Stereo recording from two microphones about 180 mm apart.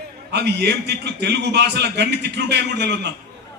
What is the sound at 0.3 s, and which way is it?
A man's voice, 70° right (ahead or behind).